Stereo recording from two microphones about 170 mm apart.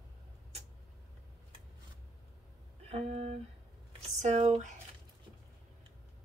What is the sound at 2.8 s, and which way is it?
Speech, 35° right (ahead or behind).